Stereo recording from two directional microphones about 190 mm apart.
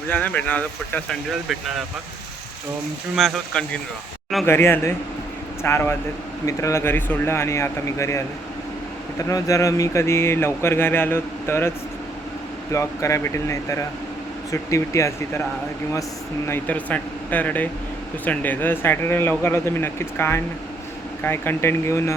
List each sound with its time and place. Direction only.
0.1 s speech: 10° left (ahead or behind)
3.2 s speech: centre (ahead or behind)
12.7 s speech: 15° left (ahead or behind)
16.5 s speech: 10° left (ahead or behind)